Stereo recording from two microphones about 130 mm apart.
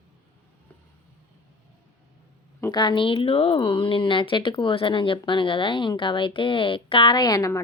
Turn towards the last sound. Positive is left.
turn(degrees=30)  # may be behind; listen again after turning